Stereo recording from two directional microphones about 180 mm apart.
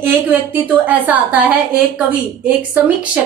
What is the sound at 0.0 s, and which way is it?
A woman's voice, 10° right (ahead or behind).